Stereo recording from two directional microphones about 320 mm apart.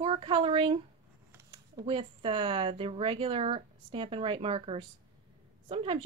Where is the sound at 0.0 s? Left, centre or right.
Centre.